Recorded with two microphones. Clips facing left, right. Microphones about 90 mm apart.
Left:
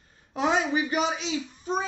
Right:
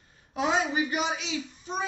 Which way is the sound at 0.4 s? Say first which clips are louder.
Left 2 dB; 35° left (ahead or behind).